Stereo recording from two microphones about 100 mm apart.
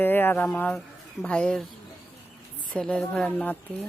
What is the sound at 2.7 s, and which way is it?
Speech, 10° left (ahead or behind).